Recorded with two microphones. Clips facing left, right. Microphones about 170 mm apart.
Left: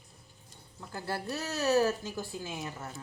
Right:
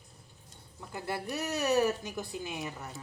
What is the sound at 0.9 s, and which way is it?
Speech, 20° right (ahead or behind).